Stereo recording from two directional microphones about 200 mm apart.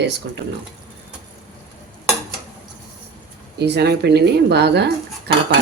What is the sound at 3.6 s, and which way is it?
Cutlery, 55° right (ahead or behind).